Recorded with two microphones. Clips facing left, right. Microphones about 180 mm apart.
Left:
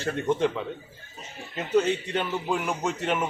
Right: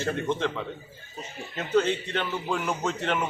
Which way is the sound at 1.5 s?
15° left (ahead or behind).